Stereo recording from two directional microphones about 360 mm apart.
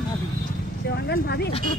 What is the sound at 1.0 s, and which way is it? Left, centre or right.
Speech, left.